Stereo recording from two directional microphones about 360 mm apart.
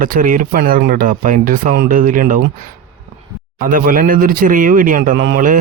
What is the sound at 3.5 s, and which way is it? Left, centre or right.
Speech, right.